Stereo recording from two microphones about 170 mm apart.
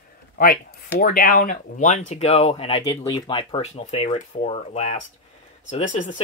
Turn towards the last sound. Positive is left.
turn(degrees=50)  # may be behind; listen again after turning